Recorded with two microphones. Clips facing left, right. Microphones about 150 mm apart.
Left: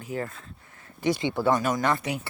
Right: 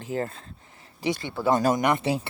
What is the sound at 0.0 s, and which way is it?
Speech, 30° right (ahead or behind).